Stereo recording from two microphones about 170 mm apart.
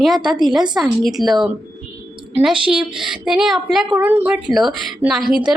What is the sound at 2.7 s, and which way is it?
A woman's voice, 5° right (ahead or behind).